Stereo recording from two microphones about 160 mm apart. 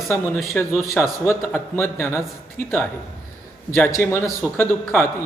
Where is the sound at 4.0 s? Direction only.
15° left (ahead or behind).